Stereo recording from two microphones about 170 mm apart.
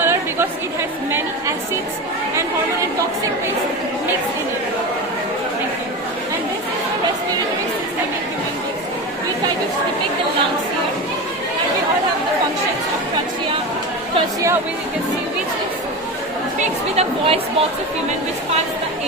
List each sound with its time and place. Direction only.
0.0 s chatter: 15° right (ahead or behind)
16.6 s speech: 35° right (ahead or behind)